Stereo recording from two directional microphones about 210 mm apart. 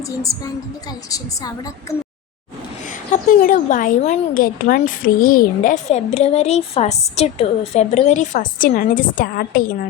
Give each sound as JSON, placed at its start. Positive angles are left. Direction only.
{"t": 0.2, "sound": "a woman's voice", "side_deg": 15}
{"t": 3.1, "sound": "speech", "side_deg": 40}